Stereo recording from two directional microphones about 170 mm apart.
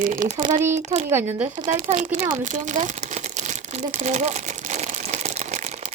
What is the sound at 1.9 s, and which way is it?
Speech, 45° right (ahead or behind).